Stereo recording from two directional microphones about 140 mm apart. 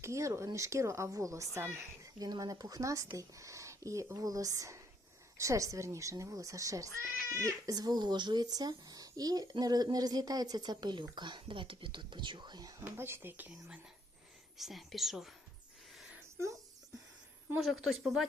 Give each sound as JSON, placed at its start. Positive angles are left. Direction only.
{"t": 0.0, "sound": "speech", "side_deg": -20}
{"t": 12.8, "sound": "speech", "side_deg": -15}
{"t": 14.6, "sound": "speech", "side_deg": 0}
{"t": 17.6, "sound": "speech", "side_deg": 0}